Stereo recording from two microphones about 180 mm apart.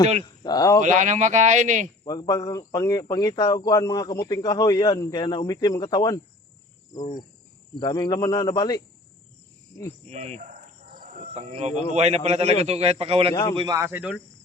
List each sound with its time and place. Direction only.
0.4 s speech: 20° left (ahead or behind)
0.8 s speech: 45° right (ahead or behind)
2.0 s speech: 20° left (ahead or behind)
6.9 s cricket: 40° left (ahead or behind)
7.8 s speech: 25° left (ahead or behind)
10.1 s a man's voice: 40° right (ahead or behind)
13.7 s cricket: 10° right (ahead or behind)